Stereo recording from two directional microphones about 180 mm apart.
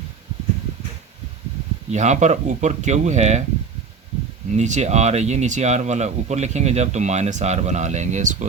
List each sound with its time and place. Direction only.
1.9 s speech: 40° right (ahead or behind)
4.5 s speech: 40° right (ahead or behind)